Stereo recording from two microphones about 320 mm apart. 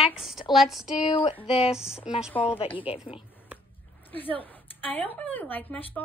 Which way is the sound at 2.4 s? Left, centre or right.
Centre.